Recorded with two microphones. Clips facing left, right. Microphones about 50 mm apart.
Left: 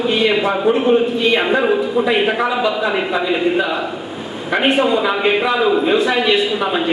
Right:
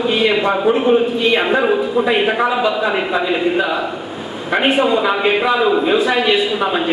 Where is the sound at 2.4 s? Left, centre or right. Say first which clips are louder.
Right 1 dB; centre.